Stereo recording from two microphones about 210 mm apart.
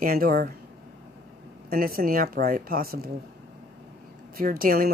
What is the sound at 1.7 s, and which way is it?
A woman's voice, 45° right (ahead or behind).